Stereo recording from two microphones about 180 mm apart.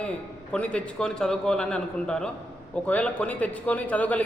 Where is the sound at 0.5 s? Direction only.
5° left (ahead or behind).